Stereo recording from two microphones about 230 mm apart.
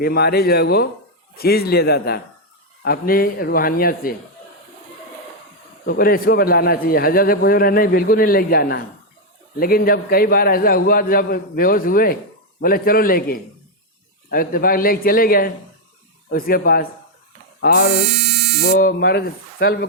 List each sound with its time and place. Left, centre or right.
0.0 s a man's voice: left
5.8 s a man's voice: left